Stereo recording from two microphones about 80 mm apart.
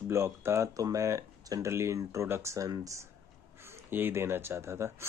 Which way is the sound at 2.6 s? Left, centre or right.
Right.